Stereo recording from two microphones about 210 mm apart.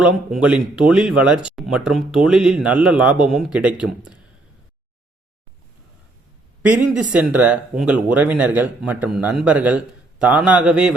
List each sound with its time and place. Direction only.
0.0 s speech: 5° right (ahead or behind)
6.6 s speech: 5° right (ahead or behind)